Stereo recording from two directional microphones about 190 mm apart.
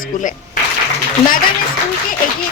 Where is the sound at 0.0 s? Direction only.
45° left (ahead or behind).